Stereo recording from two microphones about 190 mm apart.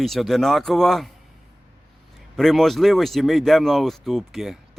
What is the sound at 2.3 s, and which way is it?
Speech, centre (ahead or behind).